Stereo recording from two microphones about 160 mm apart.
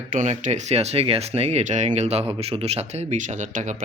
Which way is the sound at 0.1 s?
50° right (ahead or behind).